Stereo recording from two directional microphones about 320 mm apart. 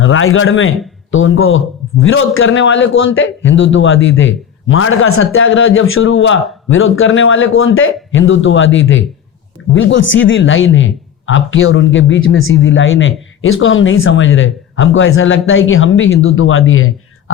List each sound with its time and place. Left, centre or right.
0.0 s a man's voice: left